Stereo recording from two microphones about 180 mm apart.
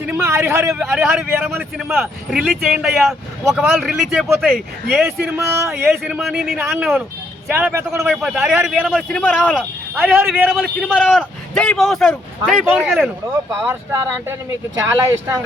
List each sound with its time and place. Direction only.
0.0 s speech: 15° right (ahead or behind)
0.9 s speech: 5° right (ahead or behind)
5.0 s speech: 15° right (ahead or behind)
6.0 s speech: centre (ahead or behind)
8.0 s speech: 5° right (ahead or behind)
9.9 s speech: 10° right (ahead or behind)
10.8 s speech: centre (ahead or behind)
13.7 s speech: 15° right (ahead or behind)